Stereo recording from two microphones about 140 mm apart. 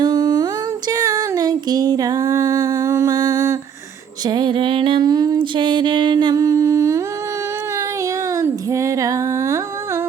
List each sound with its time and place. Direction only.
0.0 s a sound: 30° right (ahead or behind)
0.9 s music: 25° right (ahead or behind)
8.4 s humming: 25° right (ahead or behind)